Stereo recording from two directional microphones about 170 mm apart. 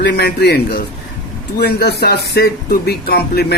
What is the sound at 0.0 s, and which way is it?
Speech, 70° left (ahead or behind).